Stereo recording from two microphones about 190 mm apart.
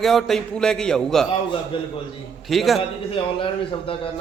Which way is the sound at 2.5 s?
Centre (ahead or behind).